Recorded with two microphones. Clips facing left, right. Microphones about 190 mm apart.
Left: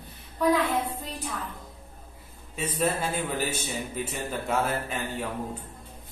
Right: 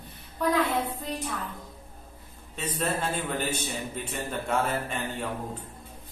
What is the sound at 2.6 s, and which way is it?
A man's voice, 10° left (ahead or behind).